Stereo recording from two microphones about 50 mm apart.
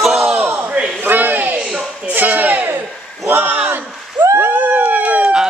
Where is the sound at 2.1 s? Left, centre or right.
Right.